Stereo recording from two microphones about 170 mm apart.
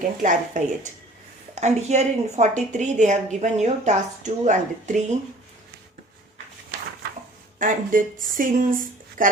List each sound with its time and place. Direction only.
0.2 s a woman's voice: 50° right (ahead or behind)
7.6 s a woman's voice: 55° right (ahead or behind)